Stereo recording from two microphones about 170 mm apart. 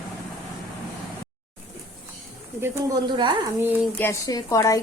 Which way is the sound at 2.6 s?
20° right (ahead or behind).